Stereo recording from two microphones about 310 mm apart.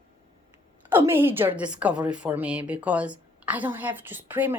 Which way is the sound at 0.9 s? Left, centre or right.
Centre.